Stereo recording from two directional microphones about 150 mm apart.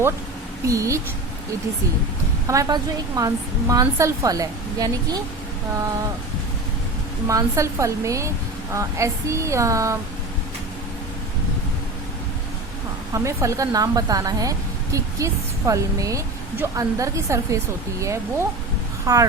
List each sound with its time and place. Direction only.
0.6 s speech: 20° right (ahead or behind)
2.5 s speech: 25° right (ahead or behind)
7.3 s speech: 20° right (ahead or behind)
13.1 s speech: 20° right (ahead or behind)